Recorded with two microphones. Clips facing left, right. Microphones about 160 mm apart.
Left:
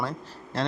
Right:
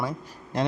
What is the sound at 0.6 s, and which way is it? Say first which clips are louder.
Speech: right 2 dB; 15° right (ahead or behind).